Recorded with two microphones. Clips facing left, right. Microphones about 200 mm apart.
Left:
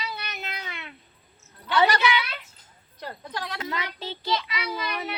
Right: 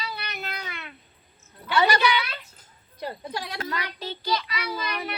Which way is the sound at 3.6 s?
20° left (ahead or behind).